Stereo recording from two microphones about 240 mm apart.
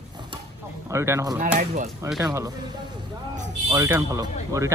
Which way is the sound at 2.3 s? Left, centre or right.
Centre.